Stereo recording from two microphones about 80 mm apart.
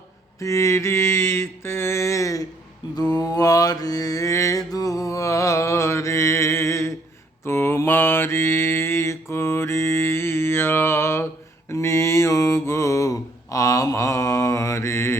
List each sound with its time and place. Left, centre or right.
0.3 s mantra: left
2.9 s mantra: left